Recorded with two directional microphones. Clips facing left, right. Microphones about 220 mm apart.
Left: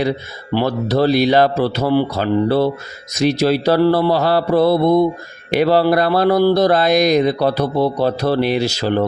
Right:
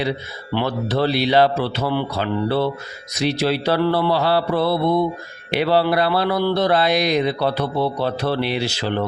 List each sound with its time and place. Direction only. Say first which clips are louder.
0.0 s speech: left 4 dB; 40° left (ahead or behind)